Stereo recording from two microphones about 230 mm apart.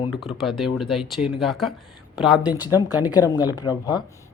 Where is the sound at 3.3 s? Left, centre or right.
Centre.